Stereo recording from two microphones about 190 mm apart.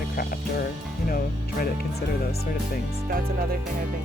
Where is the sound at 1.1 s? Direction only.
50° left (ahead or behind).